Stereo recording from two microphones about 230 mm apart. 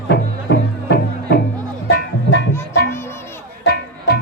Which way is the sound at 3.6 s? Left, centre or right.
Left.